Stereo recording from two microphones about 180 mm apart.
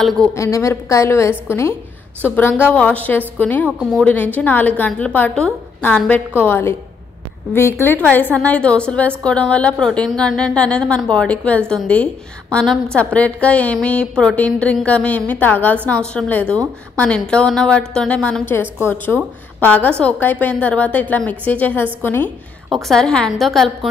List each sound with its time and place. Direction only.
0.0 s a woman's voice: centre (ahead or behind)
0.3 s a woman's voice: 15° left (ahead or behind)